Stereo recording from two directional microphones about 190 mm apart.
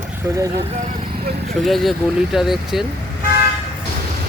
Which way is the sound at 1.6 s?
Centre (ahead or behind).